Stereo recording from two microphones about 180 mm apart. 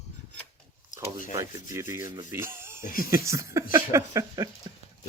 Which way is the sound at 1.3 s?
15° right (ahead or behind).